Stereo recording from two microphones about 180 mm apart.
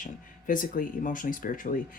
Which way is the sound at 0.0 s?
50° left (ahead or behind).